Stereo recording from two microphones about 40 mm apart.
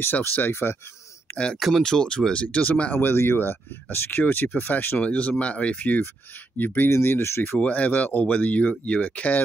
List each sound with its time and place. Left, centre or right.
0.0 s speech: left
0.5 s speech: left
1.8 s speech: centre
2.4 s speech: left
3.0 s speech: left
5.0 s speech: left
6.9 s speech: left
7.7 s speech: left